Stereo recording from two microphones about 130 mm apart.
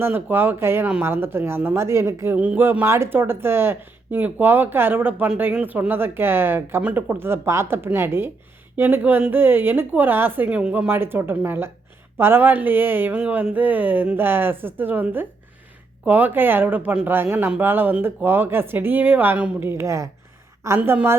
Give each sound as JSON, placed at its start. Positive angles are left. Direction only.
{"t": 0.0, "sound": "speech", "side_deg": -15}